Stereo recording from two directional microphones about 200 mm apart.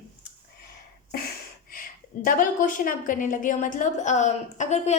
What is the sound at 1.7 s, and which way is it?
A woman's voice, 45° left (ahead or behind).